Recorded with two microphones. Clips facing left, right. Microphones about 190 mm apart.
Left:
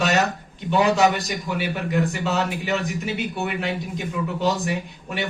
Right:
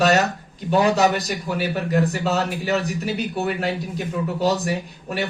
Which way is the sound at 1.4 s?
40° right (ahead or behind).